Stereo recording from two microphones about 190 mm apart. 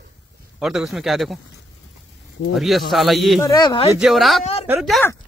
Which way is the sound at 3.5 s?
25° left (ahead or behind).